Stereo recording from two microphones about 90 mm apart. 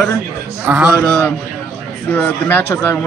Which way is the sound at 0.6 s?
20° right (ahead or behind).